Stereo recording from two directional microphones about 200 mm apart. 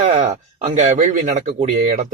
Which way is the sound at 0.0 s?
30° right (ahead or behind).